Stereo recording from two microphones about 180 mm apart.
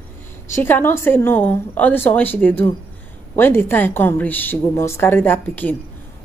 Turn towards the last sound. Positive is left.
turn(degrees=10)  # may be behind; listen again after turning